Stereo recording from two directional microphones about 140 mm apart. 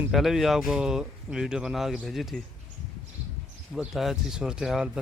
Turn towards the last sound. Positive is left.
turn(degrees=-5)  # may be behind; listen again after turning